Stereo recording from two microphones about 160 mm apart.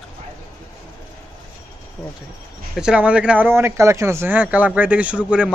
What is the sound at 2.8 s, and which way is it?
A man's voice, 5° right (ahead or behind).